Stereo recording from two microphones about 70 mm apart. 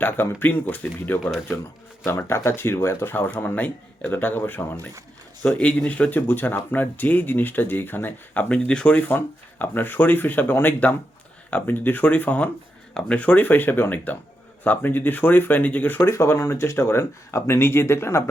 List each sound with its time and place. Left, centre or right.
0.0 s speech: left
2.0 s speech: left
5.5 s speech: centre
16.0 s speech: left